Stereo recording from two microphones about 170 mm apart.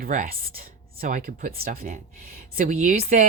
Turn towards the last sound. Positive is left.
turn(degrees=-50)  # may be behind; listen again after turning